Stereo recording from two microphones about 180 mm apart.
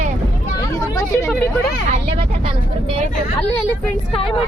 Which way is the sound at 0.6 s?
20° left (ahead or behind).